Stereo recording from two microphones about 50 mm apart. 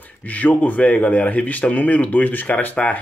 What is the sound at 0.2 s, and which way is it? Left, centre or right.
A man's voice, left.